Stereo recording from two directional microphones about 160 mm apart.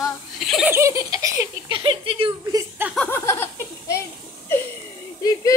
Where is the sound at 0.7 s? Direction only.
20° right (ahead or behind).